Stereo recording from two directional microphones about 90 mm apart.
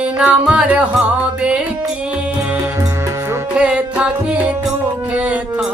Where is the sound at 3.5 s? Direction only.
10° right (ahead or behind).